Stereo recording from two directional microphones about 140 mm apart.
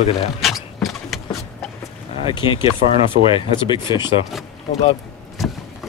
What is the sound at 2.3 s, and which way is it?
Speech, 30° left (ahead or behind).